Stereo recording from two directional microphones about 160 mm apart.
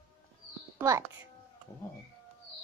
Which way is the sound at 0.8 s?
15° right (ahead or behind).